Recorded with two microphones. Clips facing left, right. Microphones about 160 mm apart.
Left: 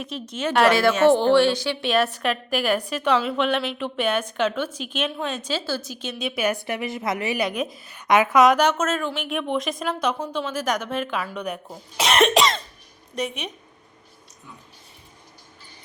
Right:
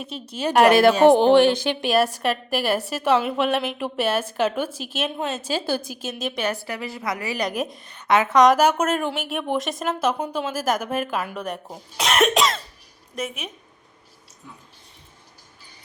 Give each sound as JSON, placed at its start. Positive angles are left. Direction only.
{"t": 0.0, "sound": "speech", "side_deg": -30}
{"t": 1.0, "sound": "a woman's voice", "side_deg": -15}
{"t": 1.4, "sound": "speech", "side_deg": -50}
{"t": 2.5, "sound": "a woman's voice", "side_deg": -5}
{"t": 5.5, "sound": "a woman's voice", "side_deg": -15}
{"t": 6.1, "sound": "speech", "side_deg": 0}
{"t": 6.4, "sound": "a woman's voice", "side_deg": 15}
{"t": 7.3, "sound": "a woman's voice", "side_deg": 0}
{"t": 8.5, "sound": "a woman's voice", "side_deg": -10}
{"t": 11.9, "sound": "cough", "side_deg": 0}
{"t": 13.1, "sound": "speech", "side_deg": 0}